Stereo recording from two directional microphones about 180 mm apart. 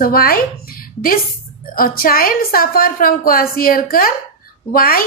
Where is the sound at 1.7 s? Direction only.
55° left (ahead or behind).